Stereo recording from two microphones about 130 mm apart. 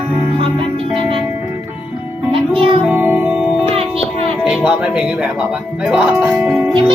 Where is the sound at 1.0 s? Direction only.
40° right (ahead or behind).